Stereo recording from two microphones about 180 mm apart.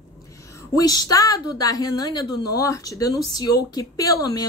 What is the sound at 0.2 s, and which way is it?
Speech, 20° left (ahead or behind).